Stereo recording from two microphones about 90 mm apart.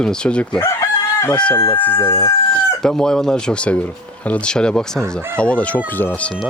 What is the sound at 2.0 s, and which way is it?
Speech, 35° left (ahead or behind).